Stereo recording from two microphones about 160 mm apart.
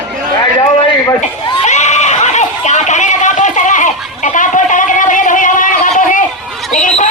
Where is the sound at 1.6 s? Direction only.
45° left (ahead or behind).